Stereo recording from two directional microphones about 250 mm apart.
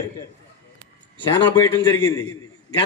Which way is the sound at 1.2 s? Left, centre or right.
Centre.